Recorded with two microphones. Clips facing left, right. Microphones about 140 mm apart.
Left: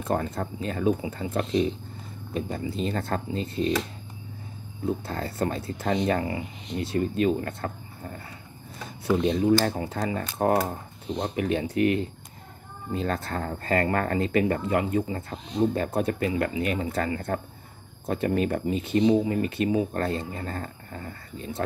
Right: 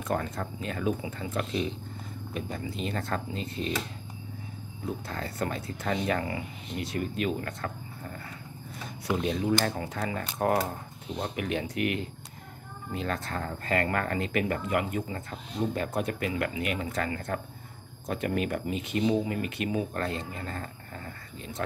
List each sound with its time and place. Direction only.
0.0 s speech: 30° left (ahead or behind)
5.0 s speech: 35° left (ahead or behind)
9.2 s speech: 30° left (ahead or behind)